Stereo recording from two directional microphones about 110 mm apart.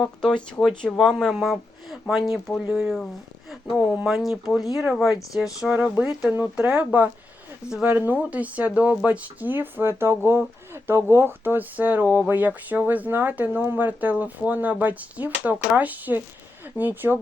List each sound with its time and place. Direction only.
0.0 s speech: 5° left (ahead or behind)
4.0 s speech: centre (ahead or behind)
5.7 s speech: 15° right (ahead or behind)